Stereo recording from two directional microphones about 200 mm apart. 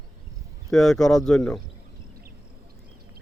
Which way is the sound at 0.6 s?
Centre (ahead or behind).